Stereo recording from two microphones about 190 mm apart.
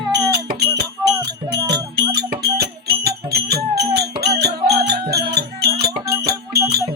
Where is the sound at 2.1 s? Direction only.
60° right (ahead or behind).